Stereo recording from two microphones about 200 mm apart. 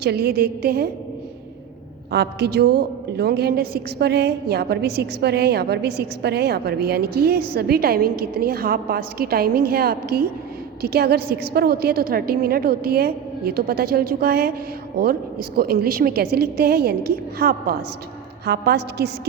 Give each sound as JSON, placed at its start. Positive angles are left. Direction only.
{"t": 0.0, "sound": "a woman's voice", "side_deg": -55}
{"t": 2.1, "sound": "a woman's voice", "side_deg": -55}